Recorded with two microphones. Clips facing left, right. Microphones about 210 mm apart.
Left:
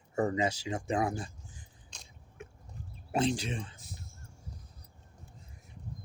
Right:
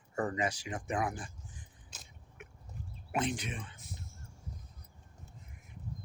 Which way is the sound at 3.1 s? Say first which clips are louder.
Left 5 dB; 30° left (ahead or behind).